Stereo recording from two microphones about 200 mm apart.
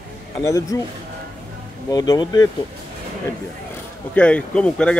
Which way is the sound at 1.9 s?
20° left (ahead or behind).